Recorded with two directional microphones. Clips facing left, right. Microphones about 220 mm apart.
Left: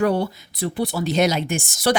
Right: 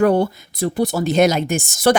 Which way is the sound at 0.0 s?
50° right (ahead or behind).